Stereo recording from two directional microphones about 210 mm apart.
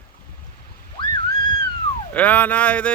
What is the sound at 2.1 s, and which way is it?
Speech, 5° left (ahead or behind).